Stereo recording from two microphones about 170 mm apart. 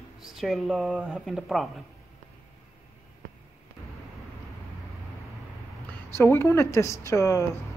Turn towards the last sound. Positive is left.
turn(degrees=20)  # may be behind; listen again after turning